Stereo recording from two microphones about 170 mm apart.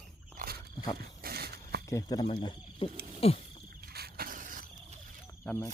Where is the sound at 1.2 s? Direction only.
65° right (ahead or behind).